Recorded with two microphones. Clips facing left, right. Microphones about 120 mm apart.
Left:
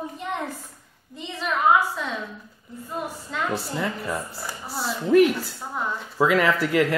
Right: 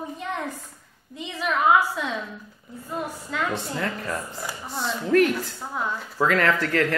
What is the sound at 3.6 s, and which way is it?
Speech, 5° left (ahead or behind).